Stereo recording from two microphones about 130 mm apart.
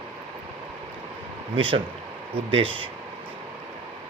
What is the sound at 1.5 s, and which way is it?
Speech, 40° right (ahead or behind).